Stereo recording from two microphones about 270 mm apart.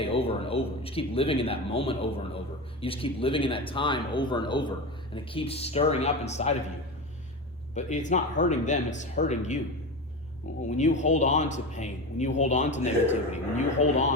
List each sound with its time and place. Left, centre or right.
0.0 s a man's voice: left
7.8 s a man's voice: left
10.7 s a man's voice: left